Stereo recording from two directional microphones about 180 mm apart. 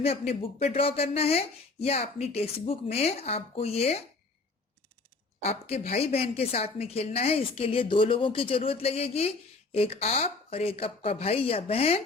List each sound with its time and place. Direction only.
0.0 s speech: 35° left (ahead or behind)
5.4 s speech: 35° left (ahead or behind)